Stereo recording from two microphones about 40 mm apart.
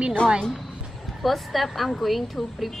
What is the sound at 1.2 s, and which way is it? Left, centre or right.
A woman's voice, centre.